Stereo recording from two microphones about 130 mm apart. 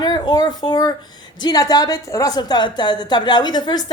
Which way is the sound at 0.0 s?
30° left (ahead or behind).